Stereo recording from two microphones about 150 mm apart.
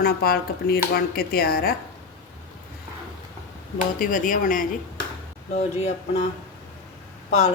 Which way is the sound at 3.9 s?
65° left (ahead or behind).